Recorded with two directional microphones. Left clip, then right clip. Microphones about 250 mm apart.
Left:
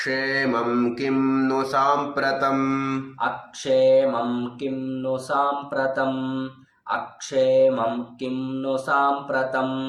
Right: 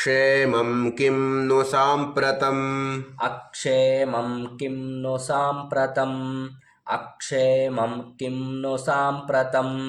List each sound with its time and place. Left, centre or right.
0.0 s mantra: right